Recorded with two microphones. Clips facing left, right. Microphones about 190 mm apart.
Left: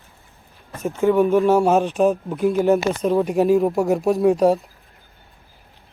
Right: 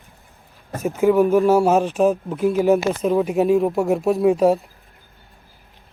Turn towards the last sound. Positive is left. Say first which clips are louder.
# even
turn(degrees=0)  # may be behind; listen again after turning